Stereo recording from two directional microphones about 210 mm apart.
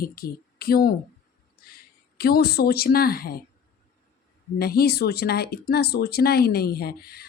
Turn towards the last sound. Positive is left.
turn(degrees=45)  # may be behind; listen again after turning